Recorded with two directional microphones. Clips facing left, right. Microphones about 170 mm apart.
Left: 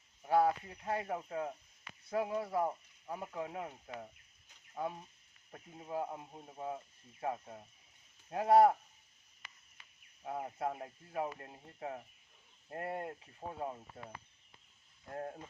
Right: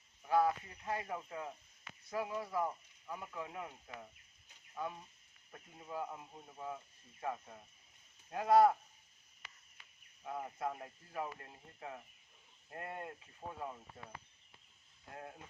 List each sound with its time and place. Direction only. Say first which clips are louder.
0.2 s speech: left 2 dB; 35° left (ahead or behind)
10.2 s speech: left 3 dB; 25° left (ahead or behind)
15.1 s speech: left 8 dB; 40° left (ahead or behind)